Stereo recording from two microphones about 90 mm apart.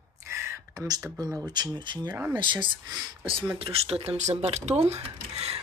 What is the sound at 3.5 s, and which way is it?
Speech, 90° right.